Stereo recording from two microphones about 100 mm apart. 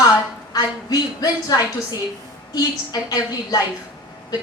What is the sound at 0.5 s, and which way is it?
A woman's voice, 40° left (ahead or behind).